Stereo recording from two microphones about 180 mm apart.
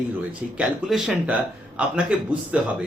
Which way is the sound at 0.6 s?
5° right (ahead or behind).